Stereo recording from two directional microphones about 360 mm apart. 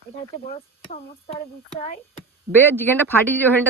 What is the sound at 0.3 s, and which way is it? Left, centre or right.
Speech, centre.